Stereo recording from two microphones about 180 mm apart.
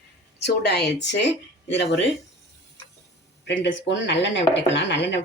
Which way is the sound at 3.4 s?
75° left (ahead or behind).